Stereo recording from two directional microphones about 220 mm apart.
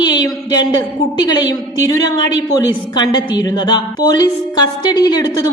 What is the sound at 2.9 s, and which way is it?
A woman's voice, 20° left (ahead or behind).